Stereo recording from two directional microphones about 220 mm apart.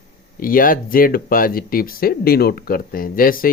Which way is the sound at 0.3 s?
40° left (ahead or behind).